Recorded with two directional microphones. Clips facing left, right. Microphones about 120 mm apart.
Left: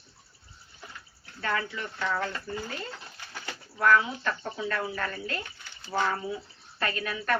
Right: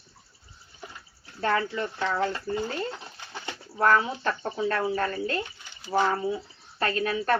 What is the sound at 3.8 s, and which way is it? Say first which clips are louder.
Speech: right 1 dB; 35° right (ahead or behind).